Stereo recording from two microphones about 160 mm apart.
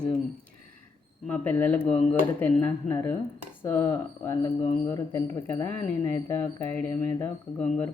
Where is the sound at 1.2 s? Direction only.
10° left (ahead or behind).